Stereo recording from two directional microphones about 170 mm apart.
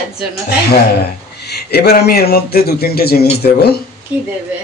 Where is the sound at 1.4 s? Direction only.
70° left (ahead or behind).